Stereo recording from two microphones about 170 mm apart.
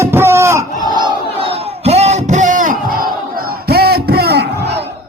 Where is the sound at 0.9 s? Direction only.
30° right (ahead or behind); by 4.9 s 75° right (ahead or behind).